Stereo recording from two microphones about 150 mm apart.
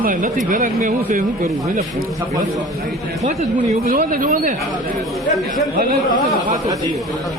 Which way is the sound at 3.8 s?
65° right (ahead or behind).